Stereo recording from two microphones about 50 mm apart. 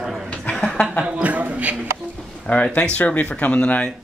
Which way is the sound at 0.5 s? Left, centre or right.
Centre.